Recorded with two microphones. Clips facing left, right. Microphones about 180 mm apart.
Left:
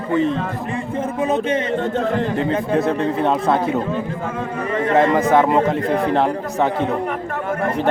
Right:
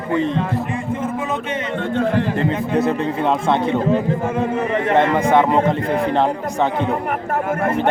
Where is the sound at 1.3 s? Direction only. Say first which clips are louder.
Left 4 dB; 35° left (ahead or behind).